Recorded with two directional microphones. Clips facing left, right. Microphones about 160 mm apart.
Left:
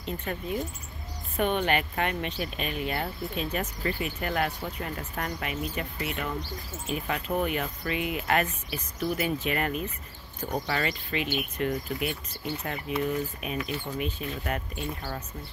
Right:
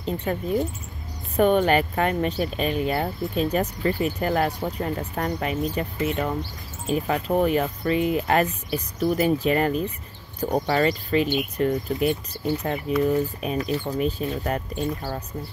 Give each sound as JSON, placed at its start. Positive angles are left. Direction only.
{"t": 0.0, "sound": "speech", "side_deg": -35}
{"t": 13.0, "sound": "speech", "side_deg": -35}